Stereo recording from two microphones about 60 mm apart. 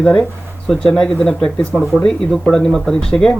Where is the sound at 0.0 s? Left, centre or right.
Centre.